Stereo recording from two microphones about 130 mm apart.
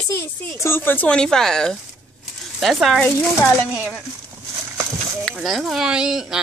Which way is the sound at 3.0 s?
20° left (ahead or behind).